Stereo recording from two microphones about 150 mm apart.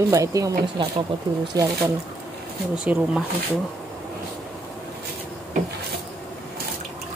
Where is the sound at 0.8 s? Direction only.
30° right (ahead or behind).